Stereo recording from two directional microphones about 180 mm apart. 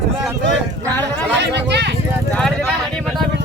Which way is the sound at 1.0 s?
70° right (ahead or behind).